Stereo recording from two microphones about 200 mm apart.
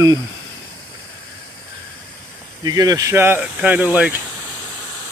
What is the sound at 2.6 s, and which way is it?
Speech, 20° right (ahead or behind).